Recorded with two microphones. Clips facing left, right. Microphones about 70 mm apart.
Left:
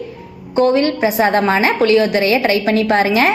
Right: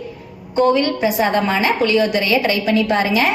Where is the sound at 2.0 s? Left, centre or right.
Left.